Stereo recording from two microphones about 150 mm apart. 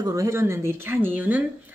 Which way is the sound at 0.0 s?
20° right (ahead or behind).